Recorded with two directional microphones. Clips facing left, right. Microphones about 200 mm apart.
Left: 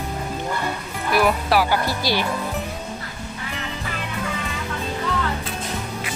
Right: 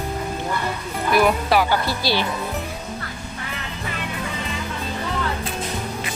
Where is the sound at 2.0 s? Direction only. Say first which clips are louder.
Right 1 dB; 15° left (ahead or behind).